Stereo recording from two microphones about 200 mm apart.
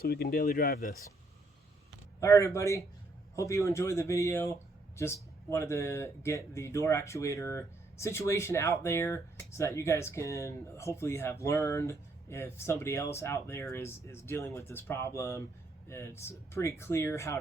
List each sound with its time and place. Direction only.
0.0 s speech: 50° left (ahead or behind)
2.2 s speech: 15° left (ahead or behind)